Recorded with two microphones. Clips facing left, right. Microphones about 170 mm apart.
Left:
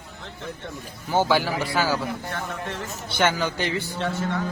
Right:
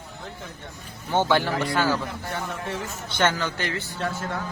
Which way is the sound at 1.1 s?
5° left (ahead or behind).